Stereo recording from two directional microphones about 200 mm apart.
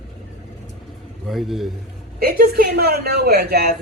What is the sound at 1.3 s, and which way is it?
Speech, centre (ahead or behind).